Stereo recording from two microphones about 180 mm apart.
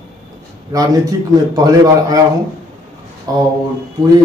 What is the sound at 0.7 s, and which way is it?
A man's voice, 20° right (ahead or behind).